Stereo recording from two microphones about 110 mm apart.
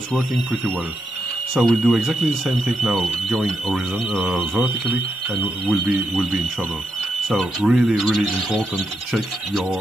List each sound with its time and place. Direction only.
0.1 s speech: 5° left (ahead or behind)
5.7 s speech: centre (ahead or behind)